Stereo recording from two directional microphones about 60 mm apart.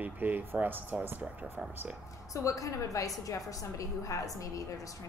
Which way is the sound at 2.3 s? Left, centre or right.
Left.